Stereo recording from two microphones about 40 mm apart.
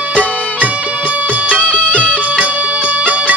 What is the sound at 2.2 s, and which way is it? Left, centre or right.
Music, right.